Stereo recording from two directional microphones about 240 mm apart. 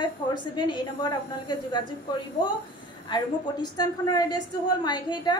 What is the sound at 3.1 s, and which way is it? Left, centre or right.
A woman's voice, centre.